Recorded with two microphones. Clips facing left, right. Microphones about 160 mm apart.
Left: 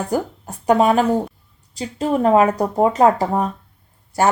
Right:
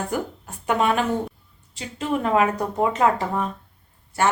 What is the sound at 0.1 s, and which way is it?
Speech, 35° left (ahead or behind).